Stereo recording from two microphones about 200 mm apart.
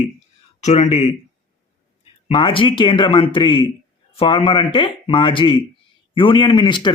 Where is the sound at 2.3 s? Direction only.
25° left (ahead or behind).